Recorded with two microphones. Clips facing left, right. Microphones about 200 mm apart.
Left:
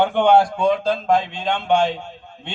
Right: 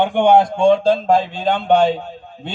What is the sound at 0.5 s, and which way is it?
Speech, 30° right (ahead or behind).